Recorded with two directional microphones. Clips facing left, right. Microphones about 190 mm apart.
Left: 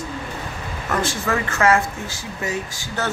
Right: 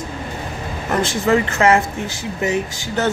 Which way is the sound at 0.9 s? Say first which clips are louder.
Right 6 dB; 20° right (ahead or behind).